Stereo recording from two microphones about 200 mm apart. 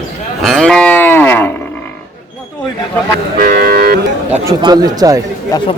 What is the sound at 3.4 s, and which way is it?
Cattle, 45° right (ahead or behind).